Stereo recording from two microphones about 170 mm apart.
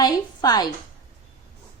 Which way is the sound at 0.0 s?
25° left (ahead or behind).